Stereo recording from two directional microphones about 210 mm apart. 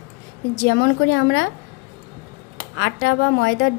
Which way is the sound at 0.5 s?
55° left (ahead or behind).